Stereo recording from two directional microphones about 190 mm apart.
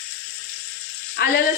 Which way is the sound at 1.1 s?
60° left (ahead or behind).